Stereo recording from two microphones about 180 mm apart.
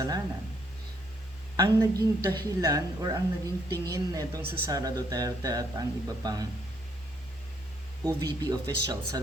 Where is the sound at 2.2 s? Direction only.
25° right (ahead or behind).